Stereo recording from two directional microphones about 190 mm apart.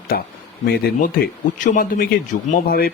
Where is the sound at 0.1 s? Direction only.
55° left (ahead or behind).